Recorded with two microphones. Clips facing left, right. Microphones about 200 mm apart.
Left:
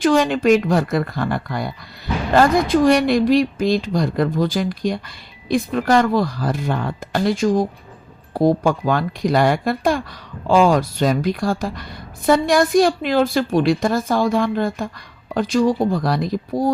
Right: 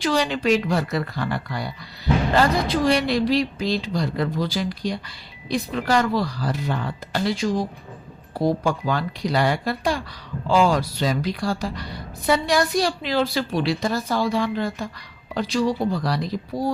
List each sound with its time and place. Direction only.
0.0 s speech: 50° left (ahead or behind)